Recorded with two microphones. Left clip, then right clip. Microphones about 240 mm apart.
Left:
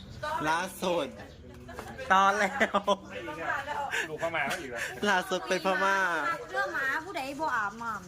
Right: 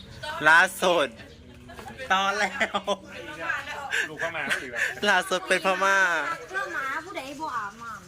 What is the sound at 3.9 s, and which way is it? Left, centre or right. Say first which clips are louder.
Chuckle: right 4 dB; centre.